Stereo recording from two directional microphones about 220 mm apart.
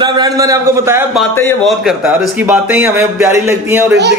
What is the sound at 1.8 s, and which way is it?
A man's voice, 10° right (ahead or behind).